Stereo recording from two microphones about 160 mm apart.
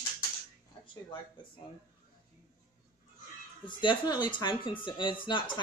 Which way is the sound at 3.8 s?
30° left (ahead or behind).